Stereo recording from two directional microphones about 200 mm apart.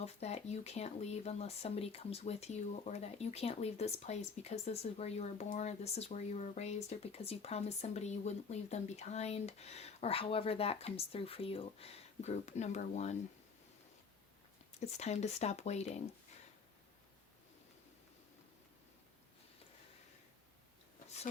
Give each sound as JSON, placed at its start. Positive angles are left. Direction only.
{"t": 0.0, "sound": "speech", "side_deg": 30}
{"t": 14.8, "sound": "speech", "side_deg": 35}